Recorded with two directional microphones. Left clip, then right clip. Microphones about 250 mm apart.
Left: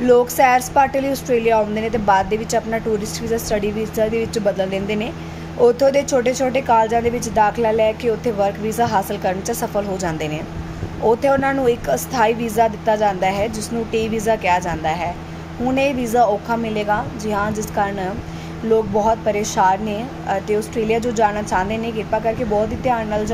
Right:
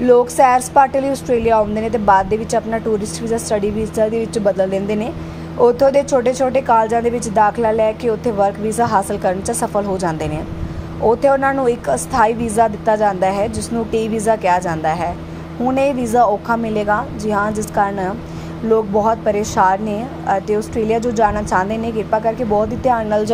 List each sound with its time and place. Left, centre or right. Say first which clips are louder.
0.0 s a woman's voice: right 2 dB; centre